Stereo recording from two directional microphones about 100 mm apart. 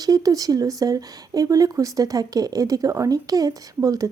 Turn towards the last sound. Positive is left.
turn(degrees=-35)  # may be behind; listen again after turning